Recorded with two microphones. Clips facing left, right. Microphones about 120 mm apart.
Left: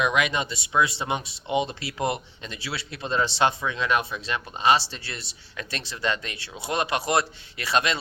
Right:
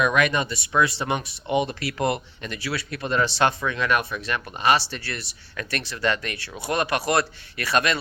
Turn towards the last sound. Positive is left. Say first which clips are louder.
# right 2 dB
turn(degrees=20)  # may be behind; listen again after turning